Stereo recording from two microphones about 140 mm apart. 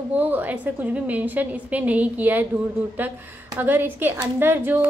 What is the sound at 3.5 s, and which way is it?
A woman's voice, 15° right (ahead or behind).